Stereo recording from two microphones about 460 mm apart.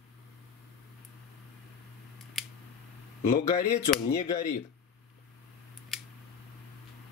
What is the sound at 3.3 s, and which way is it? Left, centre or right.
Speech, centre.